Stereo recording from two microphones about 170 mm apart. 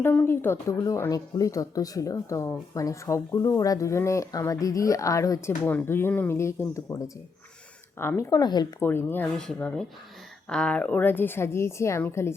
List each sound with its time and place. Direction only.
0.0 s speech: 10° left (ahead or behind)
8.8 s a woman's voice: 15° left (ahead or behind)